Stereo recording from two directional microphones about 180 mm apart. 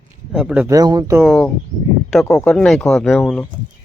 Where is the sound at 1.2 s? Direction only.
Centre (ahead or behind).